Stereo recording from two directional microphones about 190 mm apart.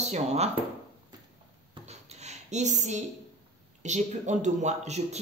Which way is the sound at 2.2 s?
35° right (ahead or behind).